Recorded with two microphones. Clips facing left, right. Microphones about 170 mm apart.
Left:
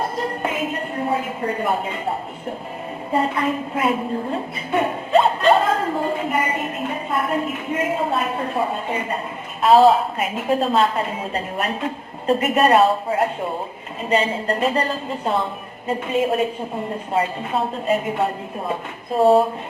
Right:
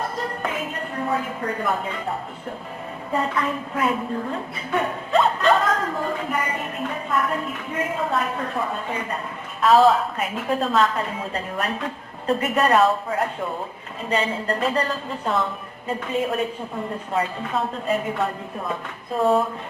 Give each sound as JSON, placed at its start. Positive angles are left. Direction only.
{"t": 0.2, "sound": "music", "side_deg": 20}
{"t": 0.9, "sound": "a woman's voice", "side_deg": 25}
{"t": 3.1, "sound": "a woman's voice", "side_deg": 30}
{"t": 17.1, "sound": "a woman's voice", "side_deg": 25}